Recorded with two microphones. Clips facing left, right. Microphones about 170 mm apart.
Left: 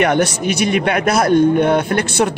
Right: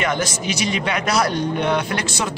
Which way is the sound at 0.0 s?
60° left (ahead or behind).